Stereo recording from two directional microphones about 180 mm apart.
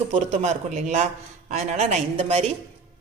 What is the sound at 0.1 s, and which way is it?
A woman's voice, 40° right (ahead or behind).